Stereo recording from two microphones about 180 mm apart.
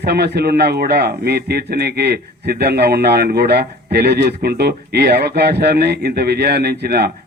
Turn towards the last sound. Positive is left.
turn(degrees=-60)  # may be behind; listen again after turning